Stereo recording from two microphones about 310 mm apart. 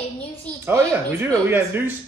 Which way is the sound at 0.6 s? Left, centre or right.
Centre.